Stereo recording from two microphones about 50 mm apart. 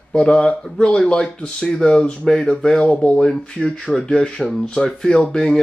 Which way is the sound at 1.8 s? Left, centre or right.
Centre.